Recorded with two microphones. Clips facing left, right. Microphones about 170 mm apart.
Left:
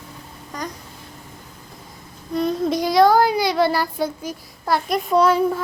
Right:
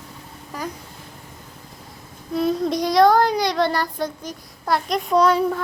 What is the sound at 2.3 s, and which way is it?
Child singing, centre (ahead or behind).